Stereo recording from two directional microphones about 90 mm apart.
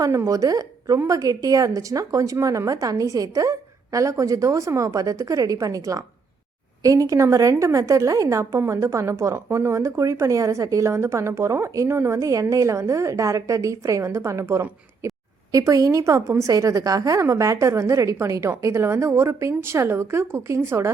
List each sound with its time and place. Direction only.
0.0 s a woman's voice: 35° right (ahead or behind)
15.0 s a sound: 35° right (ahead or behind)
15.5 s a woman's voice: 40° right (ahead or behind)